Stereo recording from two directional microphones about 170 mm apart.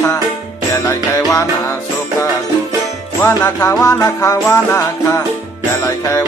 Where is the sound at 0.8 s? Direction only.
15° left (ahead or behind).